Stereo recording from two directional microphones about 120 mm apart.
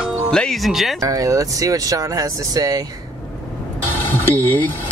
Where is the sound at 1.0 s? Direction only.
30° right (ahead or behind).